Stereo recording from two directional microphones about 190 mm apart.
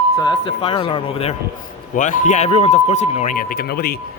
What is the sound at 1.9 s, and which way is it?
Speech, 45° left (ahead or behind).